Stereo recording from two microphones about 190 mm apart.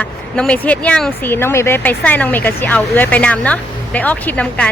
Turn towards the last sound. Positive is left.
turn(degrees=5)  # may be behind; listen again after turning